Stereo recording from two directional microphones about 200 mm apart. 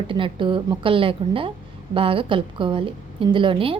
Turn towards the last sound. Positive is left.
turn(degrees=-25)  # may be behind; listen again after turning